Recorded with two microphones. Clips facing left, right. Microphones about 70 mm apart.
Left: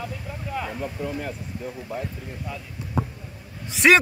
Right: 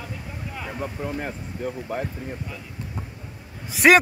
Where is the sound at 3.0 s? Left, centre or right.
Left.